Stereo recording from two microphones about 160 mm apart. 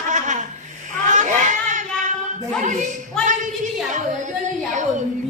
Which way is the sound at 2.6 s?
50° right (ahead or behind).